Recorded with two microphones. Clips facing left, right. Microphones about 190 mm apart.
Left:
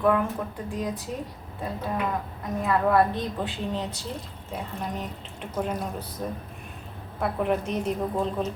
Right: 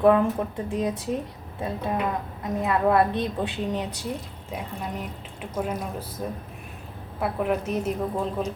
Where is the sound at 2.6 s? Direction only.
20° right (ahead or behind).